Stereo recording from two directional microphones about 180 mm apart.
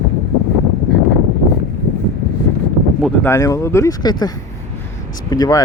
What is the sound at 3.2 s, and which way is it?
Speech, 15° left (ahead or behind).